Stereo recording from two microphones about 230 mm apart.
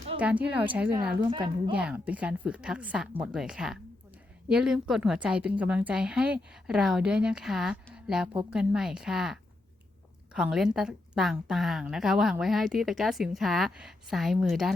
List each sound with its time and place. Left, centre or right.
0.2 s a woman's voice: centre
1.3 s a woman's voice: right
1.7 s a woman's voice: centre